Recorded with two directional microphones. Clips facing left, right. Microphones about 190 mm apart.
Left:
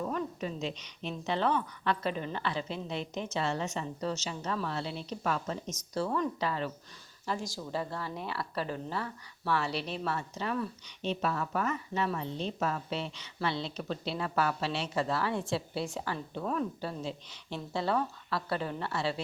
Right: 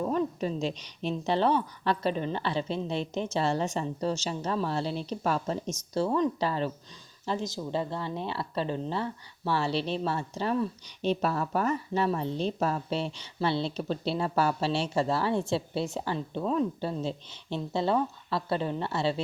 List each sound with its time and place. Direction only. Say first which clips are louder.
0.0 s a woman's voice: right 6 dB; 30° right (ahead or behind)